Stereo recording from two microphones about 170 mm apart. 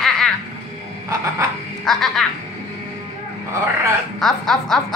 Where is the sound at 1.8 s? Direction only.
Centre (ahead or behind).